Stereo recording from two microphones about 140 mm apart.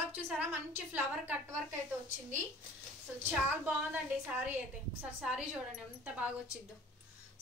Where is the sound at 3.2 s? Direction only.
10° right (ahead or behind).